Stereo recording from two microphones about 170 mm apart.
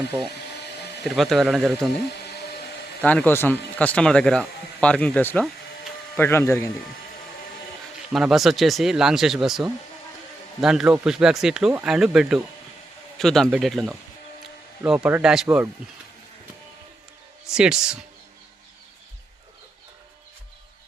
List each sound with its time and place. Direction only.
1.0 s speech: centre (ahead or behind)
3.0 s speech: 10° left (ahead or behind)
8.1 s speech: centre (ahead or behind)
17.4 s speech: 5° right (ahead or behind)